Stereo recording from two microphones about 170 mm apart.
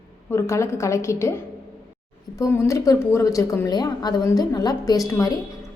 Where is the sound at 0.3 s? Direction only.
15° left (ahead or behind).